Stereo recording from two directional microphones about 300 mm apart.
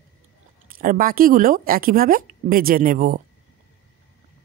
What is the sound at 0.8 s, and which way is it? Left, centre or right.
A woman's voice, right.